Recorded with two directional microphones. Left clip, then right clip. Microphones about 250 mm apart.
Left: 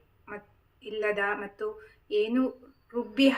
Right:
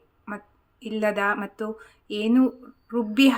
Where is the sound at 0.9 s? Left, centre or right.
Right.